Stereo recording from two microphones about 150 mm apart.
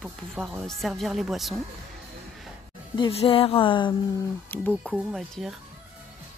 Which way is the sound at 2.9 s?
35° left (ahead or behind).